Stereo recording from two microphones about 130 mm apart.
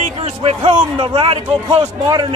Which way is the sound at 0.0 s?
50° right (ahead or behind).